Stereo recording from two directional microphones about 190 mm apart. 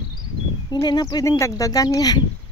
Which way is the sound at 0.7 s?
20° left (ahead or behind).